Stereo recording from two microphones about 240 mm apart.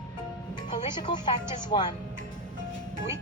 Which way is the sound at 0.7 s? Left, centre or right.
Centre.